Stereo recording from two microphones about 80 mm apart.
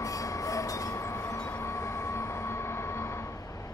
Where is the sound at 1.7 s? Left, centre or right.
Left.